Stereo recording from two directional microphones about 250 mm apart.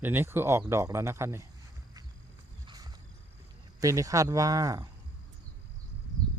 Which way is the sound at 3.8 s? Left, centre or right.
Centre.